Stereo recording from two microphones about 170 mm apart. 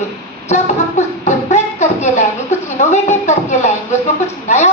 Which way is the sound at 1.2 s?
40° left (ahead or behind).